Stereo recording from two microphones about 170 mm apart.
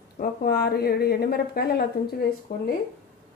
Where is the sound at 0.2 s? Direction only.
60° left (ahead or behind).